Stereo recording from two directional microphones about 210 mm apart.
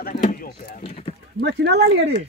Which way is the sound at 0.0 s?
40° left (ahead or behind).